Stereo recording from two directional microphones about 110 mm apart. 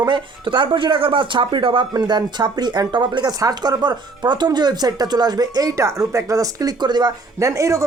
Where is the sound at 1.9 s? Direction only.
40° right (ahead or behind).